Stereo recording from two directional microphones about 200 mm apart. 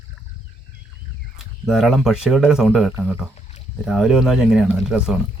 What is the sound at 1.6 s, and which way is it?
Speech, centre (ahead or behind).